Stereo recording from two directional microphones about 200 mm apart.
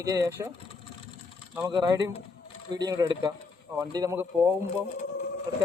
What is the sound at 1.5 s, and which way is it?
Speech, 15° right (ahead or behind).